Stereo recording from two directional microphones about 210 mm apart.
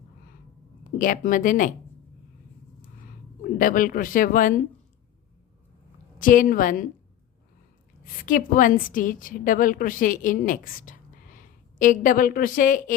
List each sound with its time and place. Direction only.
0.9 s a woman's voice: 40° left (ahead or behind)
3.4 s a woman's voice: 40° left (ahead or behind)
6.1 s a woman's voice: 40° left (ahead or behind)
8.2 s a woman's voice: 40° left (ahead or behind)